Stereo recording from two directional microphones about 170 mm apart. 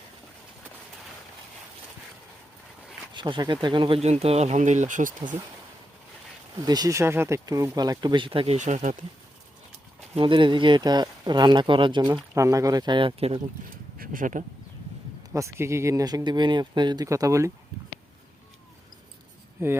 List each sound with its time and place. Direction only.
3.2 s speech: 25° right (ahead or behind); by 5.1 s 50° right (ahead or behind)
6.6 s speech: 25° right (ahead or behind)
8.5 s speech: 45° right (ahead or behind)
10.2 s speech: 30° right (ahead or behind)
14.0 s speech: 55° right (ahead or behind)
15.3 s speech: 15° right (ahead or behind)